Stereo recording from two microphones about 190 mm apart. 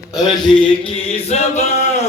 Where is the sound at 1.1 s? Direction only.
35° left (ahead or behind).